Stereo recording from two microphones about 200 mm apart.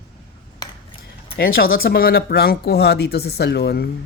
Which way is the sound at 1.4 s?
50° left (ahead or behind).